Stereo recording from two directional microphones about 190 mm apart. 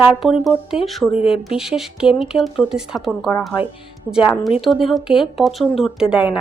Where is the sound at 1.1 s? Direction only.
30° left (ahead or behind).